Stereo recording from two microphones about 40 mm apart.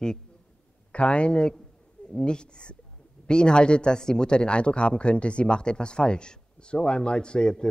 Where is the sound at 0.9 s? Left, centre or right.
Left.